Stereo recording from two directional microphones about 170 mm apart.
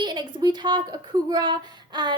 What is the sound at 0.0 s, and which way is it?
Speech, 25° right (ahead or behind).